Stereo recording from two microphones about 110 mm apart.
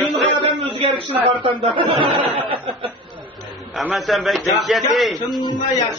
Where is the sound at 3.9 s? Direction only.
Centre (ahead or behind).